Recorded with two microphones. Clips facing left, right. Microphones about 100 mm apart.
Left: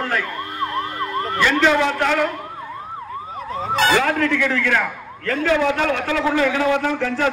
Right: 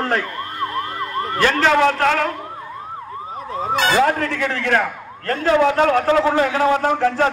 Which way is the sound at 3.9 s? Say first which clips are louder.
Right 1 dB; 30° right (ahead or behind).